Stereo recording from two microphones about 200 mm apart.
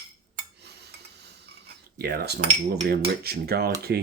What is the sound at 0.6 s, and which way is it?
Cutlery, 55° right (ahead or behind).